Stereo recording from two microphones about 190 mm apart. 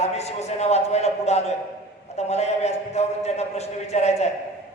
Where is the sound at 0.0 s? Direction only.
35° left (ahead or behind).